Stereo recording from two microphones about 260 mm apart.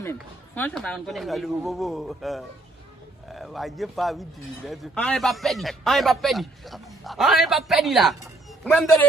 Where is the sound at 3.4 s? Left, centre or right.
Centre.